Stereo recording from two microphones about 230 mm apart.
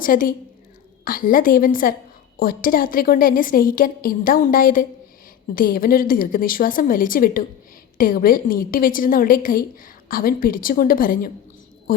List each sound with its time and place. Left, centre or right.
0.0 s a woman's voice: left